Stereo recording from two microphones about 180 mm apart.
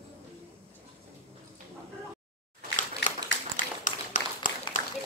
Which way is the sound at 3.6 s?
45° left (ahead or behind).